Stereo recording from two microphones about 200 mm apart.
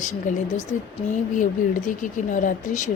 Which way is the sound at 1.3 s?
40° left (ahead or behind).